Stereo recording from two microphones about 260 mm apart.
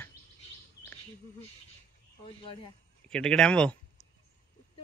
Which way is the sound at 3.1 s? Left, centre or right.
Centre.